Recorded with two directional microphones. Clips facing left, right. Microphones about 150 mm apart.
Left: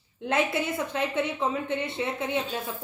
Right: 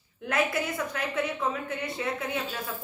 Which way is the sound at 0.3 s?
25° left (ahead or behind).